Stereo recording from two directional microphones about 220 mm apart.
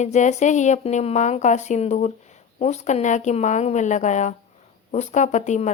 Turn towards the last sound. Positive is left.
turn(degrees=30)  # may be behind; listen again after turning